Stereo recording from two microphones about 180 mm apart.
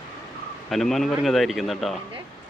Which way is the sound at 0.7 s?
Centre (ahead or behind).